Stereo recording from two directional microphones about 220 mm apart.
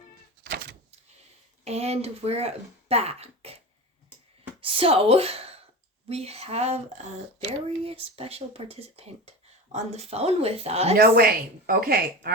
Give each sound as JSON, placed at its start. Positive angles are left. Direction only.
{"t": 0.4, "sound": "a sound", "side_deg": -50}
{"t": 1.6, "sound": "speech", "side_deg": -30}
{"t": 4.6, "sound": "speech", "side_deg": -25}
{"t": 10.9, "sound": "a woman's voice", "side_deg": -45}